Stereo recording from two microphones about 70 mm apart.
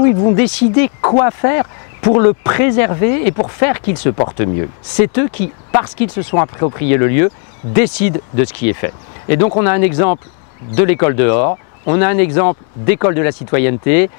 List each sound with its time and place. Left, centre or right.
0.0 s speech: left